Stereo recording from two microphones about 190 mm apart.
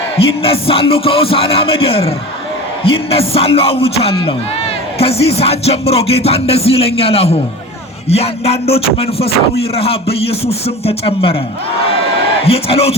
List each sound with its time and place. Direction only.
0.4 s music: 30° left (ahead or behind)
12.5 s music: 30° left (ahead or behind)